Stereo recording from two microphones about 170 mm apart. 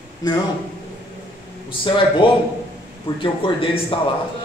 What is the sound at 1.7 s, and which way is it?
Speech, 30° left (ahead or behind).